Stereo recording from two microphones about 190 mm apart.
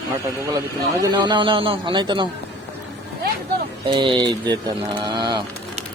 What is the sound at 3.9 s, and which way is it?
Speech, 25° right (ahead or behind).